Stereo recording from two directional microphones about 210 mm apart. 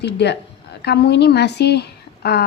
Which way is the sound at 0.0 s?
55° left (ahead or behind).